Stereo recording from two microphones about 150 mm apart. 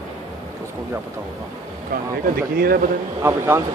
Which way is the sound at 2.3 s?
90° right.